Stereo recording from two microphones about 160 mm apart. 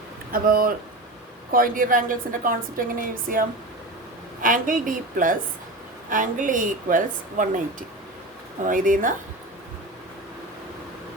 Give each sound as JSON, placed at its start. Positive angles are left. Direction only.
{"t": 0.3, "sound": "a woman's voice", "side_deg": -65}
{"t": 4.4, "sound": "a woman's voice", "side_deg": -60}